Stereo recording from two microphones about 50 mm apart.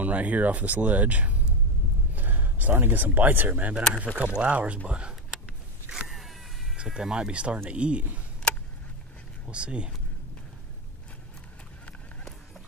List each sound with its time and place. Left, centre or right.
0.0 s speech: right
2.1 s a sound: right
2.7 s speech: right
5.3 s power windows: centre
6.8 s speech: centre
9.5 s speech: right